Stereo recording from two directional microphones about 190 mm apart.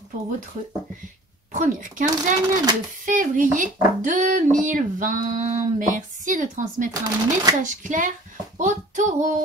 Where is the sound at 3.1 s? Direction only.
45° right (ahead or behind).